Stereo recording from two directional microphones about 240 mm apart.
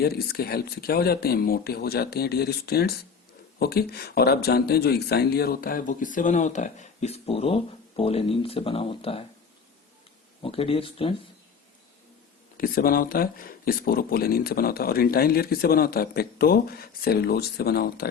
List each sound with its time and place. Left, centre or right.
0.0 s speech: left
10.4 s speech: left
12.5 s speech: left